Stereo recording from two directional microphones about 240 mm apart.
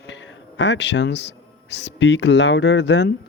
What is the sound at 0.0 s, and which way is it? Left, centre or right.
A man's voice, left.